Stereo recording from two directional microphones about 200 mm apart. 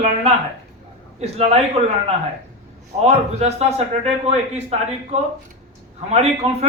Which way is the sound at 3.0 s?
35° right (ahead or behind).